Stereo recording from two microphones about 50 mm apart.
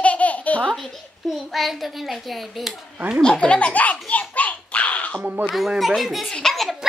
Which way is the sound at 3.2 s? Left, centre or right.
Centre.